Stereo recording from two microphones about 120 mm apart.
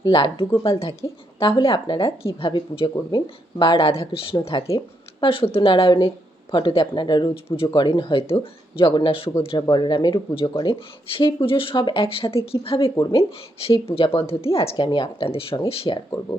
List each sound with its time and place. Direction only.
0.1 s speech: 45° left (ahead or behind)
9.6 s speech: 35° left (ahead or behind)